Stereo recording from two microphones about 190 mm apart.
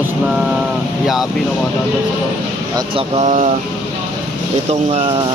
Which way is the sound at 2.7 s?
30° right (ahead or behind).